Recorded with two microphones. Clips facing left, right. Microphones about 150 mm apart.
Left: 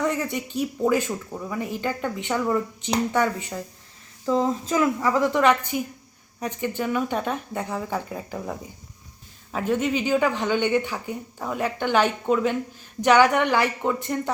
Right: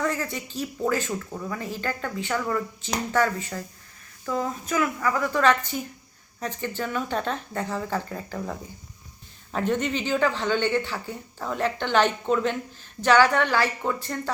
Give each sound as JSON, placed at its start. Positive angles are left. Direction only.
{"t": 0.0, "sound": "speech", "side_deg": 15}
{"t": 4.3, "sound": "a woman's voice", "side_deg": 25}